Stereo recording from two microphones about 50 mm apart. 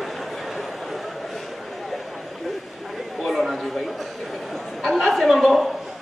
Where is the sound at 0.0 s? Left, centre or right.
Centre.